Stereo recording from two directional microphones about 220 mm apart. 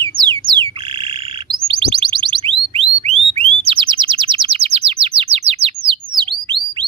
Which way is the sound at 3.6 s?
25° right (ahead or behind).